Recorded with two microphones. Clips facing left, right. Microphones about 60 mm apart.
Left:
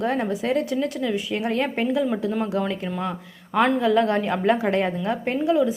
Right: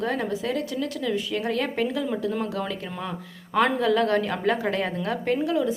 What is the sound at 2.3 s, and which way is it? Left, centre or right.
Speech, centre.